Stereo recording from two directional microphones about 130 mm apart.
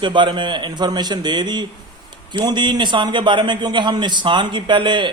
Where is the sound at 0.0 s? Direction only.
35° right (ahead or behind).